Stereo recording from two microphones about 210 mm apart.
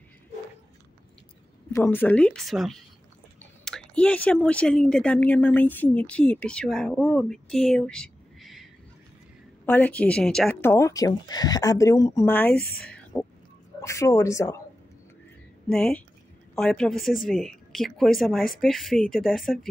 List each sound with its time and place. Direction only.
1.7 s speech: 10° left (ahead or behind)
9.7 s speech: 5° left (ahead or behind)
12.8 s a sound: 5° left (ahead or behind)
13.7 s speech: 15° left (ahead or behind)
15.7 s speech: 5° left (ahead or behind)